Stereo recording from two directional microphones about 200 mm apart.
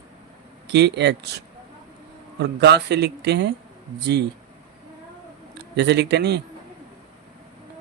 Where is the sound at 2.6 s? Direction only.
55° right (ahead or behind).